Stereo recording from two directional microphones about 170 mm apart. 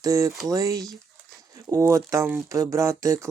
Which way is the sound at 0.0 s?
20° right (ahead or behind).